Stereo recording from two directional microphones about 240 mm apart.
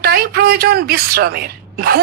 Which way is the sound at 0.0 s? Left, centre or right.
Right.